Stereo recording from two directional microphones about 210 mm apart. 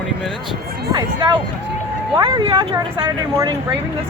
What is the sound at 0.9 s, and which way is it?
Speech, 20° right (ahead or behind).